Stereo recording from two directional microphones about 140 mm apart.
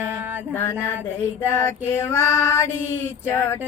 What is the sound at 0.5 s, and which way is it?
Female singing, 15° left (ahead or behind).